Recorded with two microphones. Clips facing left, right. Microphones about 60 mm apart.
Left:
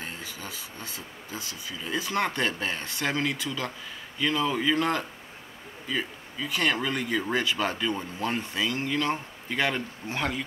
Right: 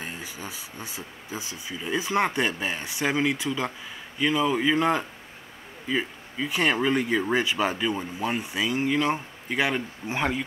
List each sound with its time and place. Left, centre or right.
0.0 s speech: centre